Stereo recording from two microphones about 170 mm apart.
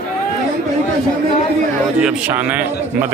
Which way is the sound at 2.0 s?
5° right (ahead or behind).